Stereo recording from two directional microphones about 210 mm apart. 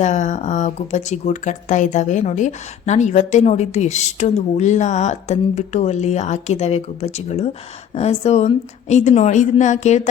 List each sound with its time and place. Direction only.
0.0 s speech: 35° left (ahead or behind)